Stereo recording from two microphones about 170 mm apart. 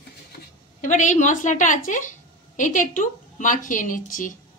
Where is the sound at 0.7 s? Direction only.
45° left (ahead or behind).